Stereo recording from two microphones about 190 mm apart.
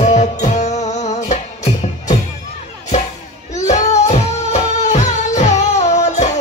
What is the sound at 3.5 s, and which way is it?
Music, 40° left (ahead or behind).